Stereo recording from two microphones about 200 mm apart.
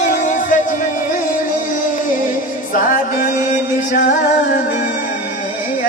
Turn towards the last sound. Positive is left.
turn(degrees=40)  # may be behind; listen again after turning